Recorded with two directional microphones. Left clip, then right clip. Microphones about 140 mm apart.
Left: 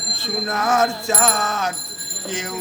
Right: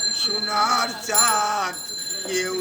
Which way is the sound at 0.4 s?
20° left (ahead or behind).